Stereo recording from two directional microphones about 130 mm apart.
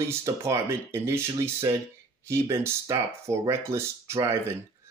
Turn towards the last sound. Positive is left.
turn(degrees=-20)  # may be behind; listen again after turning